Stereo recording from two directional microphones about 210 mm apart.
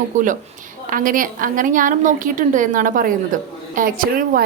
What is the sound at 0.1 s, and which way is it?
A woman's voice, 35° right (ahead or behind).